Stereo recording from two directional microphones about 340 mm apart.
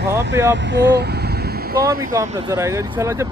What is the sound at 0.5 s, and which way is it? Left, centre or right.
Vehicle, right.